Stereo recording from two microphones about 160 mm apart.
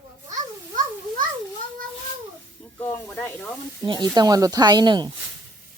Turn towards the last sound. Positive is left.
turn(degrees=-25)  # may be behind; listen again after turning